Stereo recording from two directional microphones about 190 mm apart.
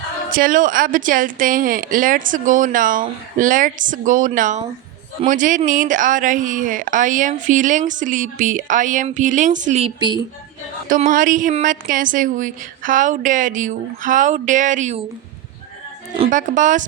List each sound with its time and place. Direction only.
0.3 s speech: 45° right (ahead or behind); by 10.2 s 25° right (ahead or behind)
10.8 s speech: 45° right (ahead or behind)
16.3 s speech: 40° right (ahead or behind)